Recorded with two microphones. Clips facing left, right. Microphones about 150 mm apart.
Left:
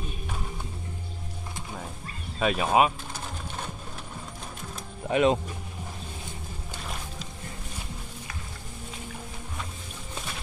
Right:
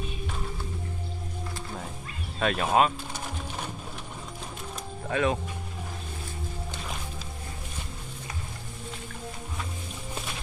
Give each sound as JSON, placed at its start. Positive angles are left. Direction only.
{"t": 2.4, "sound": "speech", "side_deg": 5}
{"t": 5.1, "sound": "speech", "side_deg": 20}